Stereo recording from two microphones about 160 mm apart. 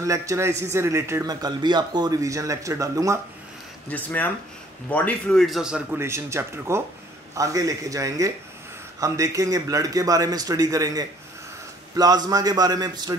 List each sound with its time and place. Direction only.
0.0 s speech: 20° right (ahead or behind)
3.9 s speech: 10° left (ahead or behind); by 13.1 s 25° right (ahead or behind)